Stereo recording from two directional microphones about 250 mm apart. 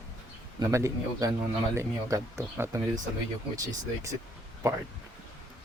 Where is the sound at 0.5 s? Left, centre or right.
Centre.